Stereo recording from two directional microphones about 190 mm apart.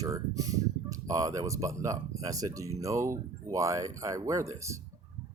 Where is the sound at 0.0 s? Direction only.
15° right (ahead or behind).